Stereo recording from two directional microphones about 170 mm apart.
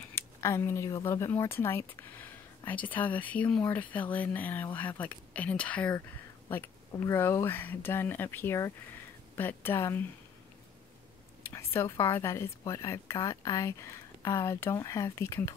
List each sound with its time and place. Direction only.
0.1 s speech: 15° left (ahead or behind)
11.5 s speech: 15° left (ahead or behind)